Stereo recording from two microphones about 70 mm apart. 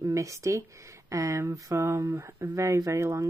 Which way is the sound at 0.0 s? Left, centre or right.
Right.